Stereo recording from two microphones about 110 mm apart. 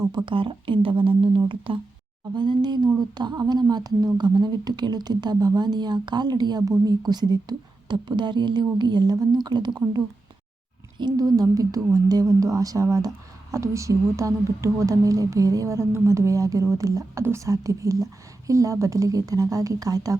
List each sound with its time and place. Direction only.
0.3 s a woman's voice: 50° right (ahead or behind); by 20.1 s 35° right (ahead or behind)